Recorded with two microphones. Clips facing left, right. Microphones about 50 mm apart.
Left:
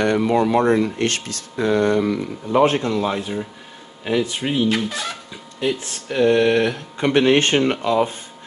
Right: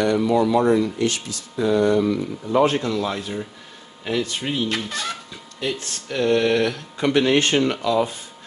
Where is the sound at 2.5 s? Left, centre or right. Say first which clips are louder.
Left 2 dB; left.